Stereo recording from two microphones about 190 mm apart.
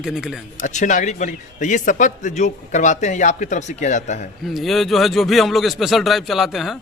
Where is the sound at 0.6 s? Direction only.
40° left (ahead or behind).